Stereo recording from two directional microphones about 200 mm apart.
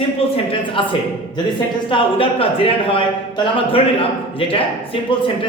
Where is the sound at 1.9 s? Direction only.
25° left (ahead or behind).